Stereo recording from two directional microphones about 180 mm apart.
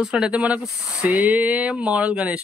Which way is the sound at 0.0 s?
5° right (ahead or behind).